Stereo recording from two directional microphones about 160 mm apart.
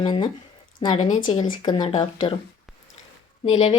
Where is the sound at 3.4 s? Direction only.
40° left (ahead or behind).